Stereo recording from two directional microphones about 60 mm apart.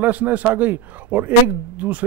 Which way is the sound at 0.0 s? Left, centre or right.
Right.